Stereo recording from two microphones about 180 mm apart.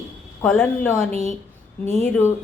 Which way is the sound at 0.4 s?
10° left (ahead or behind).